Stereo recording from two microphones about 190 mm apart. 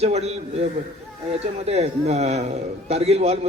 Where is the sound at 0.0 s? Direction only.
35° right (ahead or behind).